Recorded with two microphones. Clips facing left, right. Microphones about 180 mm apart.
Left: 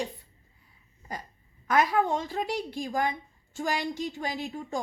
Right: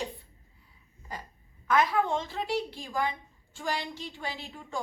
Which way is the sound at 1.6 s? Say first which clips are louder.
Left 1 dB; 40° left (ahead or behind).